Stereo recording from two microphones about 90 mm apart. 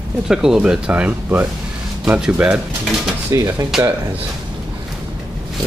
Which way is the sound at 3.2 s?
35° right (ahead or behind).